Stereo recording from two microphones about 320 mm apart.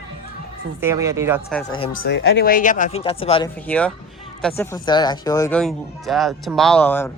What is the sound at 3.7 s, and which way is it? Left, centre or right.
Speech, centre.